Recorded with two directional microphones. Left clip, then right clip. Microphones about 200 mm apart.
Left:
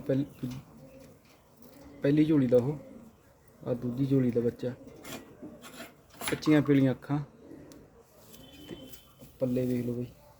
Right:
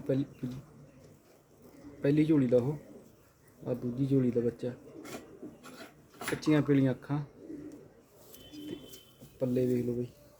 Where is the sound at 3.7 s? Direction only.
15° left (ahead or behind).